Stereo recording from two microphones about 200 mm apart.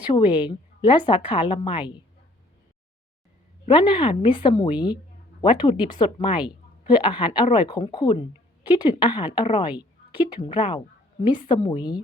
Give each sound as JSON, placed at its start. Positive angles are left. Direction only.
{"t": 0.1, "sound": "a woman's voice", "side_deg": 25}
{"t": 3.7, "sound": "a woman's voice", "side_deg": 25}